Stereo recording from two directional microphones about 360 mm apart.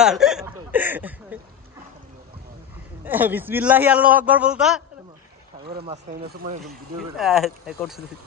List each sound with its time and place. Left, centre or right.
0.0 s speech: centre
3.1 s a man's voice: centre
5.7 s speech: centre
7.2 s a man's voice: centre